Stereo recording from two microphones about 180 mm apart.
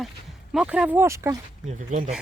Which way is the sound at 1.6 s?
45° right (ahead or behind).